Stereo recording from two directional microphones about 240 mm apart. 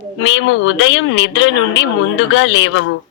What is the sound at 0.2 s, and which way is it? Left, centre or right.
Speech, left.